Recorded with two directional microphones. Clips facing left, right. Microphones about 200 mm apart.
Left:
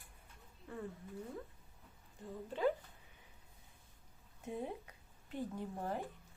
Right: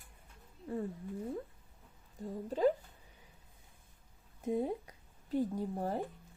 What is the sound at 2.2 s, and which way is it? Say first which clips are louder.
Speech: right 7 dB; 40° right (ahead or behind).